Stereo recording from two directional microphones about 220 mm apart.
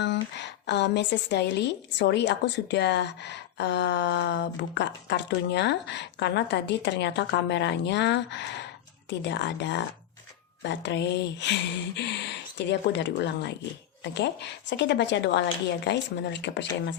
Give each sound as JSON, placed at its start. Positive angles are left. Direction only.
{"t": 0.0, "sound": "a woman's voice", "side_deg": 50}